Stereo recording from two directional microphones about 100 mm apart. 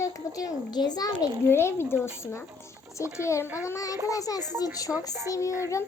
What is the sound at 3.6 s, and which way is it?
Child singing, 30° left (ahead or behind).